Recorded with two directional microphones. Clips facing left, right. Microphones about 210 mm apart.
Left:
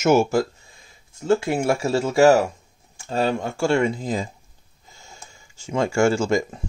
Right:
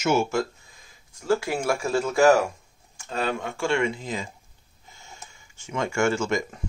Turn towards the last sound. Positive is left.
turn(degrees=30)  # may be behind; listen again after turning